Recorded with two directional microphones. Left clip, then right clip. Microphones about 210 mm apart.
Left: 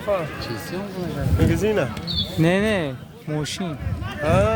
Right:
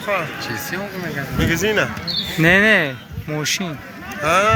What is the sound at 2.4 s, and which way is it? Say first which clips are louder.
Speech: right 8 dB; 10° left (ahead or behind).